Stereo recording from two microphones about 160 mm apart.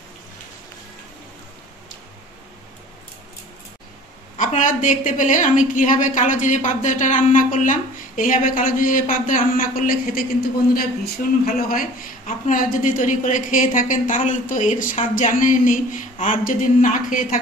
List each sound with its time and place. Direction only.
4.4 s a woman's voice: 55° left (ahead or behind)
12.3 s a woman's voice: 55° left (ahead or behind)